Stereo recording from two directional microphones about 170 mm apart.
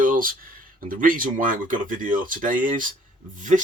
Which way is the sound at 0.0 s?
55° right (ahead or behind).